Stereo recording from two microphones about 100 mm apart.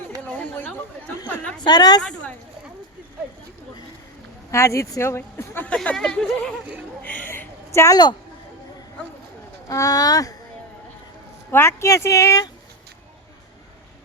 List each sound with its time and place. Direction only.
0.2 s chatter: 20° left (ahead or behind)
1.5 s a woman's voice: 45° left (ahead or behind)
2.0 s a sound: 10° left (ahead or behind)
4.5 s speech: 30° left (ahead or behind)
5.6 s speech: 10° left (ahead or behind)
7.0 s a sound: 20° left (ahead or behind)
9.6 s speech: 35° left (ahead or behind)
11.5 s speech: 25° left (ahead or behind)